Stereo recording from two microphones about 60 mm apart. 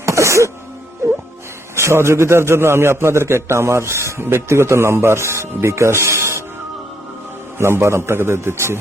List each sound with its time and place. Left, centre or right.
0.0 s music: right
1.7 s a man's voice: right
7.6 s a man's voice: right